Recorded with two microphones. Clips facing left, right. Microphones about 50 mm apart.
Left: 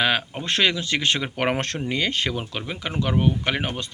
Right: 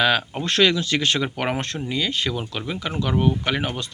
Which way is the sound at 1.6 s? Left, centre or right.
Left.